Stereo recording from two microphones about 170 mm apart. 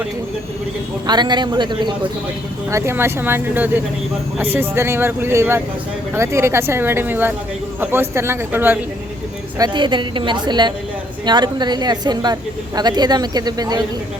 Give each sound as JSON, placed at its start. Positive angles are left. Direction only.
{"t": 1.0, "sound": "a woman's voice", "side_deg": -25}
{"t": 2.6, "sound": "speech", "side_deg": -15}
{"t": 9.6, "sound": "a woman's voice", "side_deg": -25}